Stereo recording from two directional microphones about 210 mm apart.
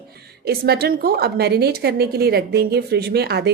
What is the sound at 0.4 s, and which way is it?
A woman's voice, 50° right (ahead or behind).